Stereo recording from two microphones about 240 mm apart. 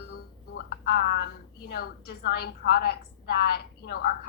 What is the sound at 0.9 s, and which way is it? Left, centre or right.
A woman's voice, left.